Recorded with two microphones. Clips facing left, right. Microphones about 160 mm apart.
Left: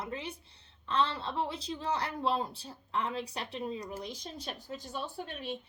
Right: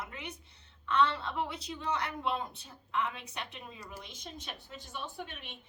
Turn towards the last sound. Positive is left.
turn(degrees=35)  # may be behind; listen again after turning